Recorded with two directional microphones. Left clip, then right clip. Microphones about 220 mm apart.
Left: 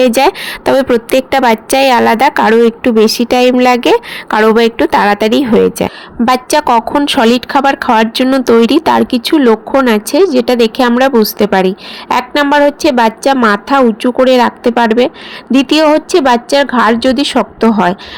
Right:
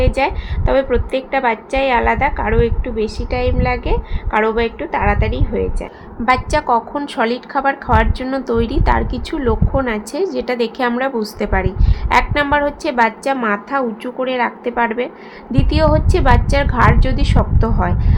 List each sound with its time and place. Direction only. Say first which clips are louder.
0.0 s a woman's voice: left 9 dB; 50° left (ahead or behind)